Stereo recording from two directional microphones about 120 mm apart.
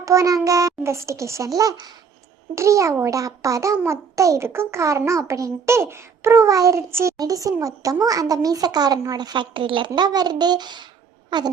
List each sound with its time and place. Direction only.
0.0 s a child's voice: 25° right (ahead or behind)